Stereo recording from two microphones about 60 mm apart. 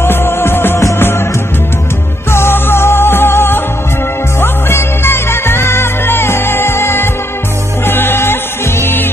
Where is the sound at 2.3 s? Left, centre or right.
Left.